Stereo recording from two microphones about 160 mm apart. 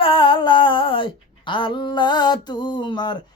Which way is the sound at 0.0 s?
30° left (ahead or behind).